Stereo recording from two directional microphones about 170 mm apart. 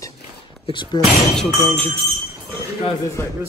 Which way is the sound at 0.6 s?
25° left (ahead or behind).